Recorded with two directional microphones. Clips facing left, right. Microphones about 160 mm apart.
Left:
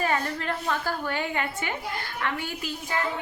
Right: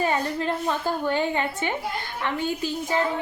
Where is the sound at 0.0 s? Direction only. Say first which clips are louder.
Right 3 dB; 25° right (ahead or behind).